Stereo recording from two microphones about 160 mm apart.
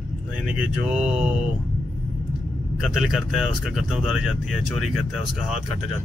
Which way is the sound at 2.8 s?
Centre (ahead or behind).